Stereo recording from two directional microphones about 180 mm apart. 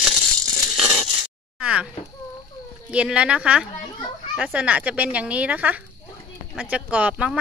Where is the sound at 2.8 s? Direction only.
5° right (ahead or behind).